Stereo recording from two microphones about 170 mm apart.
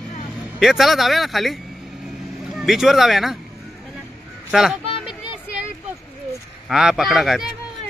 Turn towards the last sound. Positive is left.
turn(degrees=0)  # may be behind; listen again after turning